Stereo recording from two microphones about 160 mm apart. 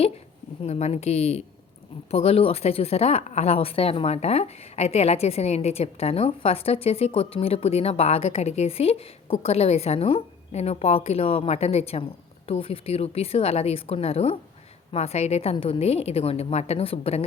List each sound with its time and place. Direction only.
0.6 s speech: 45° left (ahead or behind)